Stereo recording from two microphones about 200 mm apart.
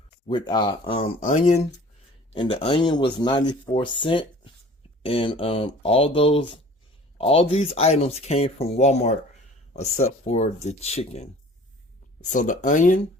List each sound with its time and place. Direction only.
0.3 s speech: 20° left (ahead or behind)
1.2 s speech: 35° left (ahead or behind)
2.3 s speech: 25° left (ahead or behind)